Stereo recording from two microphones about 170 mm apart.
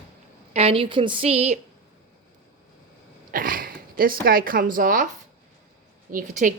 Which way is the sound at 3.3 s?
55° right (ahead or behind).